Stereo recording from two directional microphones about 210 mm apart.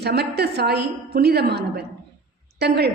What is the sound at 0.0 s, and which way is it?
A woman's voice, 50° right (ahead or behind).